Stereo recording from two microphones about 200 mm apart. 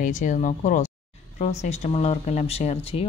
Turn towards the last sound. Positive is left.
turn(degrees=30)  # may be behind; listen again after turning